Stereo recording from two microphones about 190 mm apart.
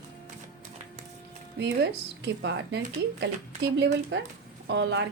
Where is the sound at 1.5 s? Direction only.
65° right (ahead or behind).